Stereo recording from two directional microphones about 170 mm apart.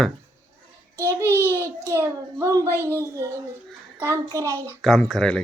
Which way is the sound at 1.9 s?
15° right (ahead or behind).